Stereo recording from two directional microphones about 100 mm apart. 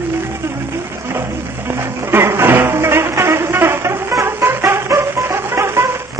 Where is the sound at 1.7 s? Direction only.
25° right (ahead or behind).